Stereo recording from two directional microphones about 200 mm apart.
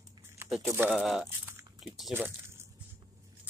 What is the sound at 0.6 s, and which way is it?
Speech, 10° right (ahead or behind).